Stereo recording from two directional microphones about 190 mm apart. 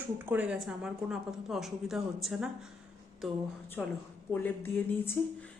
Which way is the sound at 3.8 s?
Centre (ahead or behind).